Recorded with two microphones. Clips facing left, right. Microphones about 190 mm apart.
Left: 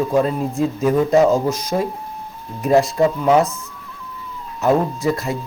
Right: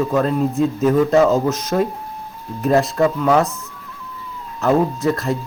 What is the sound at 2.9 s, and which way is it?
Speech, 20° left (ahead or behind).